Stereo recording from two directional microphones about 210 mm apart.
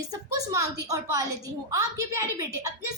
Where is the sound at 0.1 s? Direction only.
15° right (ahead or behind).